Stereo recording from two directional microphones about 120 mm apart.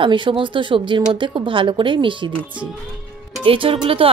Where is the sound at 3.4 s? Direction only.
50° right (ahead or behind).